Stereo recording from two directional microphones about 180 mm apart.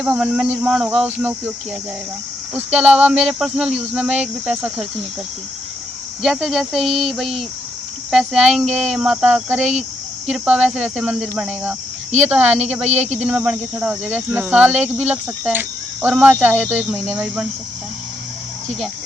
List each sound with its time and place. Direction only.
0.0 s speech: 5° right (ahead or behind)
2.7 s speech: 5° right (ahead or behind)
6.2 s speech: centre (ahead or behind)
12.8 s speech: 35° right (ahead or behind)
13.2 s speech: 5° right (ahead or behind)